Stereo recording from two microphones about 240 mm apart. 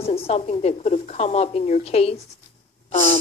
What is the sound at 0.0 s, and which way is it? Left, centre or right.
A woman's voice, left.